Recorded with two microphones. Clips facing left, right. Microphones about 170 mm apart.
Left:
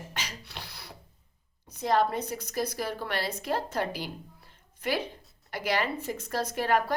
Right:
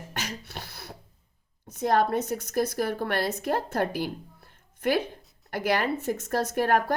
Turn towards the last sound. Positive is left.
turn(degrees=-55)  # may be behind; listen again after turning